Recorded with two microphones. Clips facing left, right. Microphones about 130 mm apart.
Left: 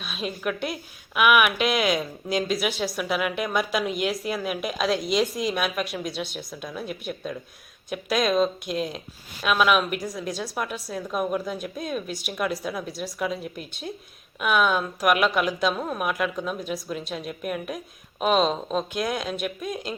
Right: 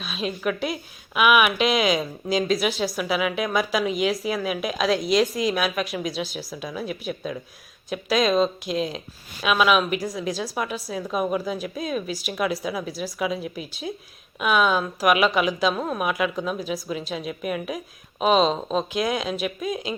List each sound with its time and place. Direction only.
0.0 s a woman's voice: centre (ahead or behind)